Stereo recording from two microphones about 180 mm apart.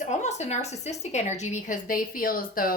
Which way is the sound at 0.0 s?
40° left (ahead or behind).